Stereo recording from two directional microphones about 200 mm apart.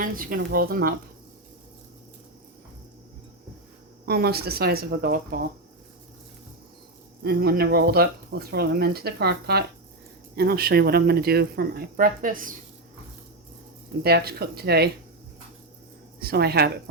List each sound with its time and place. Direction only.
0.0 s speech: 45° right (ahead or behind)
4.0 s speech: 50° right (ahead or behind)
7.3 s speech: 50° right (ahead or behind)
14.0 s speech: 50° right (ahead or behind)
16.2 s speech: 50° right (ahead or behind)